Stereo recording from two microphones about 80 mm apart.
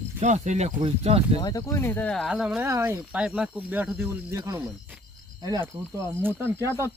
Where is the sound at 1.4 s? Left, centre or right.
Left.